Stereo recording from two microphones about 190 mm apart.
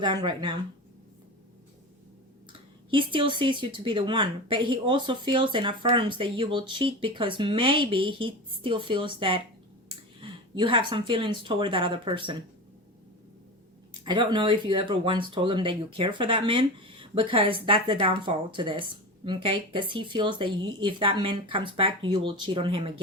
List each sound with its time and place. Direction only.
0.0 s speech: 20° right (ahead or behind)
2.9 s speech: 25° right (ahead or behind)
14.0 s speech: 25° right (ahead or behind)